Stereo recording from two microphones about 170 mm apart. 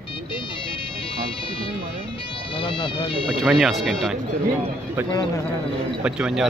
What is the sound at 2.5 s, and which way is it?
Bagpipes, 30° left (ahead or behind).